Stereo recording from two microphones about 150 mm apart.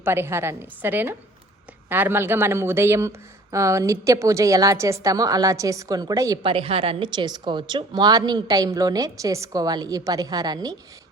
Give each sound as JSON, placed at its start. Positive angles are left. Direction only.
{"t": 0.0, "sound": "a woman's voice", "side_deg": -15}
{"t": 6.4, "sound": "speech", "side_deg": -35}